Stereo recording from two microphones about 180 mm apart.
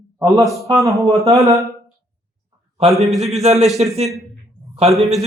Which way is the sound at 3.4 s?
35° right (ahead or behind).